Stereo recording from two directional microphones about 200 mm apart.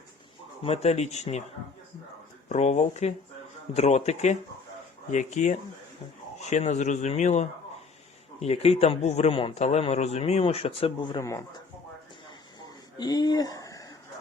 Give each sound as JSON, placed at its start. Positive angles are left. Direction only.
{"t": 0.6, "sound": "a man's voice", "side_deg": 30}
{"t": 2.5, "sound": "a man's voice", "side_deg": 35}
{"t": 11.2, "sound": "speech", "side_deg": 15}
{"t": 12.5, "sound": "a sound", "side_deg": 20}